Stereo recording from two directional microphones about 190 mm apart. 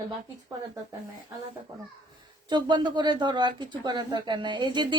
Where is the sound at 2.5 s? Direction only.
25° right (ahead or behind).